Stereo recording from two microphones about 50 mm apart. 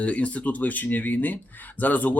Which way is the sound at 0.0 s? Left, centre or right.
Left.